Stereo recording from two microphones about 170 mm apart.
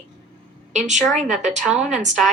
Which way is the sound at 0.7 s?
45° right (ahead or behind).